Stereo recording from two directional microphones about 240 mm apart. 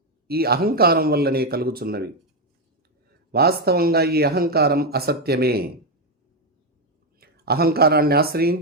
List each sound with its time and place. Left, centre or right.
0.3 s speech: right
3.1 s speech: right
7.2 s speech: right